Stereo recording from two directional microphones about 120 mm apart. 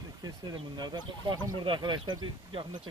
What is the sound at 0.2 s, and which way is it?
Speech, 35° right (ahead or behind).